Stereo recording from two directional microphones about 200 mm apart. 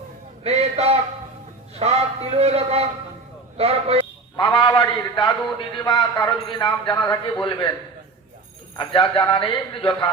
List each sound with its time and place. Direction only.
0.4 s a sound: 30° right (ahead or behind)
1.8 s a man's voice: 30° right (ahead or behind)
4.4 s a man's voice: 25° left (ahead or behind)
8.8 s a man's voice: 25° left (ahead or behind)